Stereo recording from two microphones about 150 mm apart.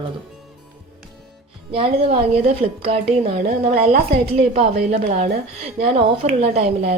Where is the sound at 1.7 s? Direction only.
40° right (ahead or behind).